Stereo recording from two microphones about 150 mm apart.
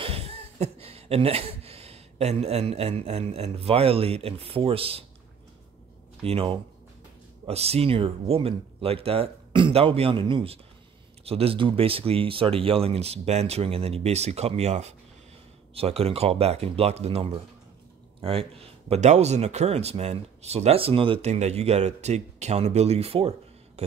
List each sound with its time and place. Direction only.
0.0 s speech: 40° right (ahead or behind)
6.2 s speech: 40° right (ahead or behind)